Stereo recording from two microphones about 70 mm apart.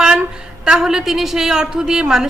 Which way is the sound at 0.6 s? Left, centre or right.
Centre.